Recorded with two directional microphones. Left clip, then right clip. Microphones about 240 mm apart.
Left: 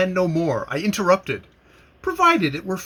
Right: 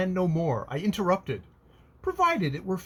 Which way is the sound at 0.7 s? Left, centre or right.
Centre.